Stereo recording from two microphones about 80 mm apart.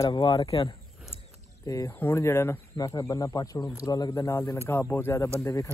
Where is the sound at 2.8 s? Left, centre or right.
Left.